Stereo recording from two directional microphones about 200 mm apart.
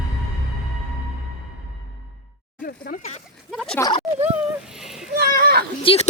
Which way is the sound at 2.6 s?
45° left (ahead or behind).